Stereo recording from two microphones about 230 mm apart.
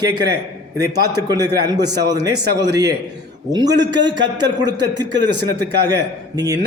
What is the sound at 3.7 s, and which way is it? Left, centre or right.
Speech, right.